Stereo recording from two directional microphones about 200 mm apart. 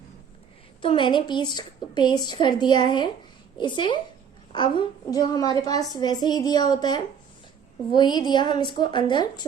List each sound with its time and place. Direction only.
0.8 s a woman's voice: 25° left (ahead or behind)